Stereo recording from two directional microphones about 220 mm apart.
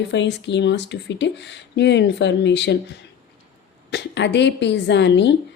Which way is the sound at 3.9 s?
50° left (ahead or behind).